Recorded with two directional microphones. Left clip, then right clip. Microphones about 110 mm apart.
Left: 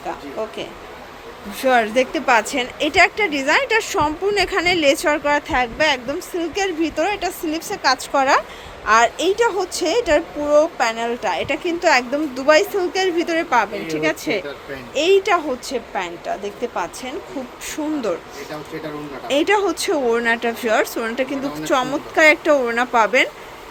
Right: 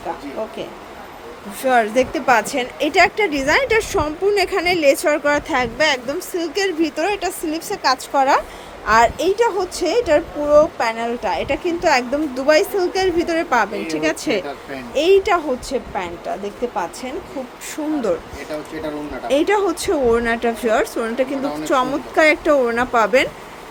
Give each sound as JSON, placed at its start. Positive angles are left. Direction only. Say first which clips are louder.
{"t": 1.6, "sound": "a woman's voice", "louder": "even", "side_deg": -15}
{"t": 19.3, "sound": "a woman's voice", "louder": "even", "side_deg": -15}